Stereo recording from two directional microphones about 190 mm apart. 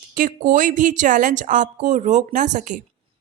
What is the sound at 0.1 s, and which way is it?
A woman's voice, 45° right (ahead or behind).